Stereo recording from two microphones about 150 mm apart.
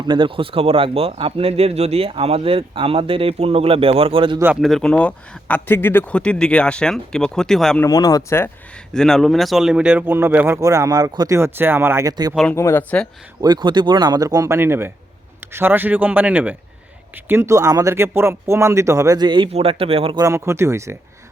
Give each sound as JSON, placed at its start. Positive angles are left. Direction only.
{"t": 0.0, "sound": "speech", "side_deg": -30}
{"t": 4.6, "sound": "speech", "side_deg": 5}
{"t": 7.8, "sound": "speech", "side_deg": 25}
{"t": 8.9, "sound": "speech", "side_deg": 5}
{"t": 12.5, "sound": "speech", "side_deg": 15}
{"t": 13.4, "sound": "speech", "side_deg": -30}
{"t": 20.1, "sound": "speech", "side_deg": -20}